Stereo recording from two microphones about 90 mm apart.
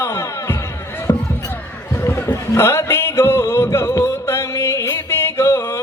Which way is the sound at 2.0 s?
25° left (ahead or behind).